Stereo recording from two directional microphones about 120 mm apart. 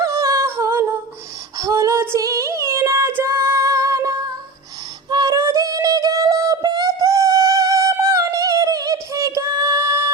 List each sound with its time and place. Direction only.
0.0 s humming: 25° right (ahead or behind)
1.5 s female singing: 25° right (ahead or behind)
5.0 s synthetic singing: 35° right (ahead or behind)